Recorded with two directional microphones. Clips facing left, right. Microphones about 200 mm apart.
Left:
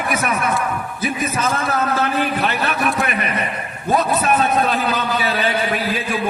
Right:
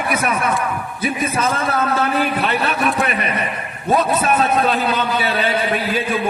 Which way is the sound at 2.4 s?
30° right (ahead or behind).